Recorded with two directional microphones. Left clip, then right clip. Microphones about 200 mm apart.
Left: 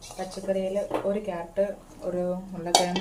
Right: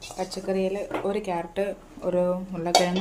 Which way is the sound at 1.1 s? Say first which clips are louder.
Right 1 dB; 50° right (ahead or behind).